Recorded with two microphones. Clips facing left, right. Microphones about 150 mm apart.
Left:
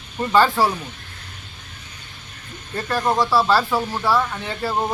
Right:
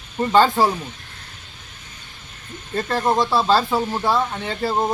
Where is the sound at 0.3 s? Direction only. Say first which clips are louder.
Right 1 dB; 20° right (ahead or behind).